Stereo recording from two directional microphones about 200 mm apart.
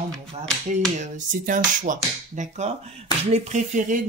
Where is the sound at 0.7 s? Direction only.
35° right (ahead or behind).